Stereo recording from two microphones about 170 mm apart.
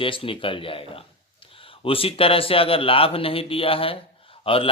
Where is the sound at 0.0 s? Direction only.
30° left (ahead or behind).